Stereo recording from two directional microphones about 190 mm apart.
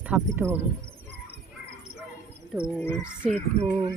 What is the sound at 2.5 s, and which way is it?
Speech, 5° right (ahead or behind).